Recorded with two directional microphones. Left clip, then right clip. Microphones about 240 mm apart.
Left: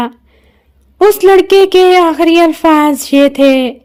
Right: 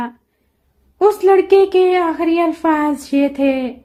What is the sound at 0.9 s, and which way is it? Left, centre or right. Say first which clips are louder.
A woman's voice: left 6 dB; left.